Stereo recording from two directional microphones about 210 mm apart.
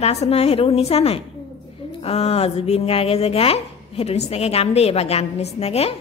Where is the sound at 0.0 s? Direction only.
30° left (ahead or behind).